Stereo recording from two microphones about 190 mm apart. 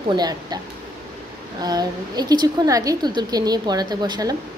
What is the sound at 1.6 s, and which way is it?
A woman's voice, 20° right (ahead or behind).